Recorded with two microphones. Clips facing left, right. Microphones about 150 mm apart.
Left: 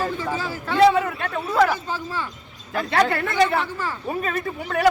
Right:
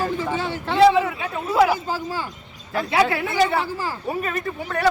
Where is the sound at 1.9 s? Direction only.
30° right (ahead or behind).